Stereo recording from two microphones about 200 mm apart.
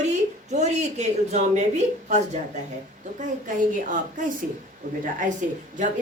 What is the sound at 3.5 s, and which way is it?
A woman's voice, 40° right (ahead or behind).